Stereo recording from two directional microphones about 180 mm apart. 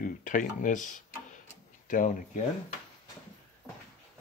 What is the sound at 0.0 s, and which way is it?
Speech, 45° left (ahead or behind).